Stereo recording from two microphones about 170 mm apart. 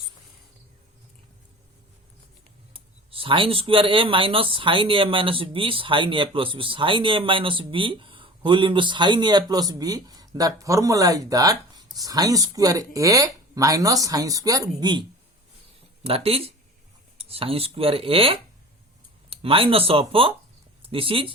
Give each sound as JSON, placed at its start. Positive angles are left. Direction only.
{"t": 2.7, "sound": "speech", "side_deg": -30}
{"t": 16.0, "sound": "speech", "side_deg": -35}